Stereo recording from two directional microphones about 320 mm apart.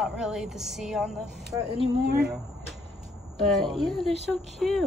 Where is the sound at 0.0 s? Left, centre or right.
Centre.